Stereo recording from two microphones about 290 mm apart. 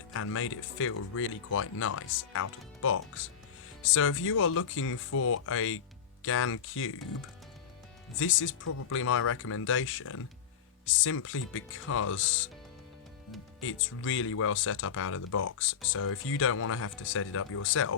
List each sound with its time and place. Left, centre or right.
0.1 s speech: left
8.2 s speech: left
8.6 s speech: left
9.0 s speech: left
13.6 s speech: left